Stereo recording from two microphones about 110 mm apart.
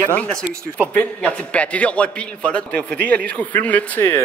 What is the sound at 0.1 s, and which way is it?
A man's voice, 10° left (ahead or behind).